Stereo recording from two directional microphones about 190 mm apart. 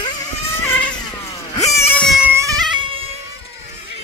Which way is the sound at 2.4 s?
20° right (ahead or behind).